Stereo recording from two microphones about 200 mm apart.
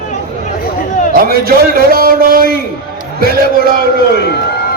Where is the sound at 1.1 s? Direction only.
50° right (ahead or behind).